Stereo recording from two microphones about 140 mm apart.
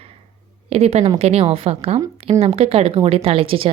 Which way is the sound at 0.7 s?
50° right (ahead or behind).